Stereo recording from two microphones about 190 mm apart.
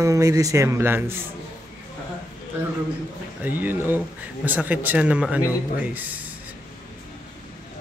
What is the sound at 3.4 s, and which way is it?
Speech, 10° right (ahead or behind).